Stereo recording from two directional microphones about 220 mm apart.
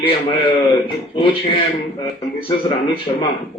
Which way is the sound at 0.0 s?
25° left (ahead or behind).